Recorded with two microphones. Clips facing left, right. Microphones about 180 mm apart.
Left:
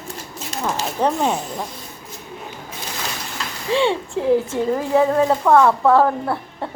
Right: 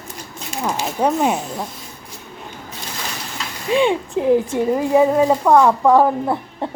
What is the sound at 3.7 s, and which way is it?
Speech, 15° right (ahead or behind).